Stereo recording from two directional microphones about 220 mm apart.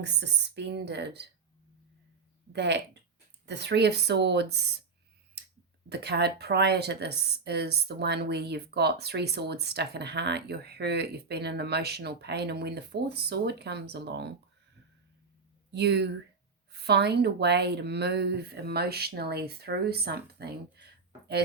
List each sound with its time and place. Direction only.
0.0 s speech: 50° right (ahead or behind)
2.5 s speech: 50° right (ahead or behind)
5.9 s speech: 50° right (ahead or behind)
15.7 s speech: 50° right (ahead or behind)